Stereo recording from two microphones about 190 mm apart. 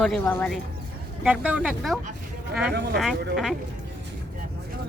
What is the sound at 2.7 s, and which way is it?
Speech, 60° right (ahead or behind).